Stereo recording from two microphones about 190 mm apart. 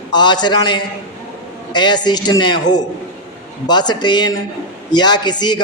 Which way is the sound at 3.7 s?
20° left (ahead or behind).